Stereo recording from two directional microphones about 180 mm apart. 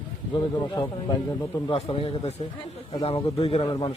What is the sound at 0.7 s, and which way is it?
A man's voice, 20° left (ahead or behind).